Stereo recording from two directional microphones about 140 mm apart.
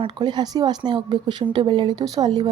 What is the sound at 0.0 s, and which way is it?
Speech, 30° right (ahead or behind).